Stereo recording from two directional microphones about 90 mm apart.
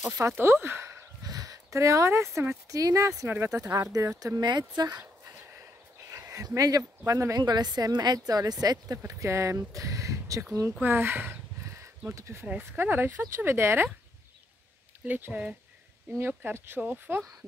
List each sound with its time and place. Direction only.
0.4 s speech: 30° right (ahead or behind)
1.2 s a sound: 45° right (ahead or behind)
2.7 s a woman's voice: 40° right (ahead or behind)
4.4 s speech: 50° right (ahead or behind)
6.0 s a sound: 35° right (ahead or behind)
7.1 s a woman's voice: 35° right (ahead or behind)
7.3 s a woman's voice: 50° right (ahead or behind)
10.8 s a sound: 25° right (ahead or behind)
12.2 s a woman's voice: 30° right (ahead or behind)
15.0 s speech: 20° right (ahead or behind)